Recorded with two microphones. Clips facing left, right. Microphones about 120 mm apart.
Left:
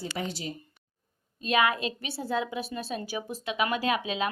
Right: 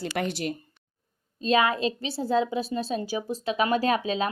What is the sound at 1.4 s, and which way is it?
A woman's voice, 30° right (ahead or behind).